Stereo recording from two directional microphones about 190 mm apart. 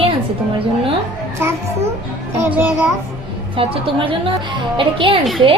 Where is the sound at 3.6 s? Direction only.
30° right (ahead or behind).